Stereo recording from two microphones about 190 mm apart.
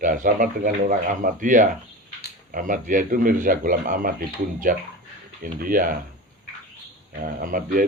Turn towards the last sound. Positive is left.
turn(degrees=-50)  # may be behind; listen again after turning